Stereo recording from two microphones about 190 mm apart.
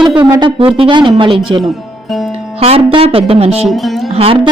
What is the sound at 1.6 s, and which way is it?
Speech, centre (ahead or behind).